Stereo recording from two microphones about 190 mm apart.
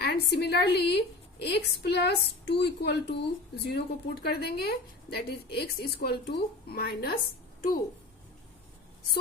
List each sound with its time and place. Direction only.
0.0 s a woman's voice: 55° left (ahead or behind)